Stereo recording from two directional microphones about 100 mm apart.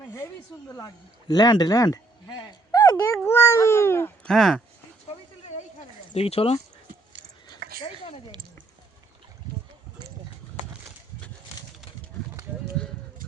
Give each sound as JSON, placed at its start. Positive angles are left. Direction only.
{"t": 1.3, "sound": "speech", "side_deg": 45}
{"t": 2.7, "sound": "dog", "side_deg": 35}
{"t": 3.2, "sound": "speech", "side_deg": 25}
{"t": 4.2, "sound": "speech", "side_deg": 5}
{"t": 6.1, "sound": "speech", "side_deg": 80}
{"t": 7.4, "sound": "a sound", "side_deg": 45}